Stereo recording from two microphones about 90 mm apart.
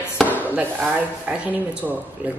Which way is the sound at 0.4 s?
20° right (ahead or behind).